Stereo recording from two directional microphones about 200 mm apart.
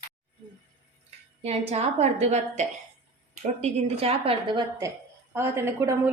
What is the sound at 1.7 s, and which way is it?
A woman's voice, 30° right (ahead or behind).